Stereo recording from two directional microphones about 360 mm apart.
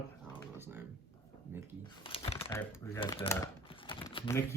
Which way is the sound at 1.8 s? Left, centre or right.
Centre.